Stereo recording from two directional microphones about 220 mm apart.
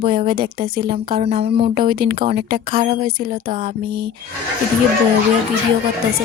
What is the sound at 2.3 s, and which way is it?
Speech, 40° right (ahead or behind).